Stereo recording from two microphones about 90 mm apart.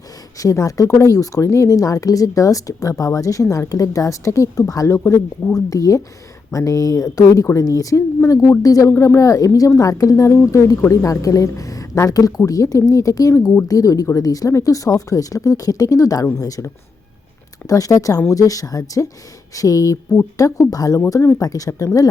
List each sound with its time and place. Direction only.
0.3 s speech: 40° left (ahead or behind)
13.7 s speech: 40° left (ahead or behind)